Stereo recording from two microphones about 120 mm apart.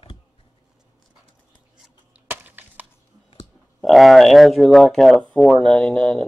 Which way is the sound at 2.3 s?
15° right (ahead or behind).